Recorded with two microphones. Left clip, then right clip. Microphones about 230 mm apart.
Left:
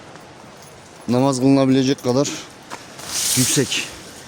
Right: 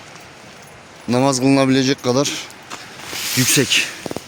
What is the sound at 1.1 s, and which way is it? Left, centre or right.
Speech, centre.